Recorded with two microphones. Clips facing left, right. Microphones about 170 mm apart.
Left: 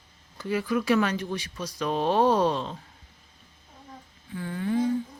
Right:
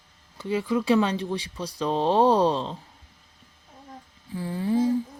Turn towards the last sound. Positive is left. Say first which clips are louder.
# right 3 dB
turn(degrees=-30)  # may be behind; listen again after turning